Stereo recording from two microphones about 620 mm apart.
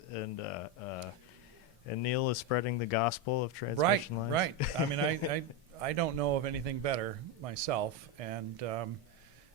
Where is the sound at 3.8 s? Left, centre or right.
Right.